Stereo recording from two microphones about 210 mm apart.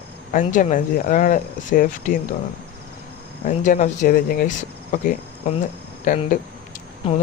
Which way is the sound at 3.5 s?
35° left (ahead or behind).